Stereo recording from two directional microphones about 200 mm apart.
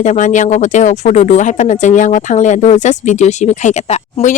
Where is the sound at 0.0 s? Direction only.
35° left (ahead or behind).